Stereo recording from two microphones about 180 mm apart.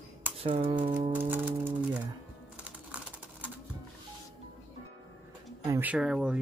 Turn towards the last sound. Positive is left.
turn(degrees=-5)  # may be behind; listen again after turning